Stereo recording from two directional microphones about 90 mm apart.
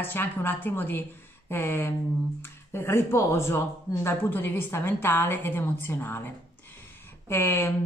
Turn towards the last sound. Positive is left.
turn(degrees=25)  # may be behind; listen again after turning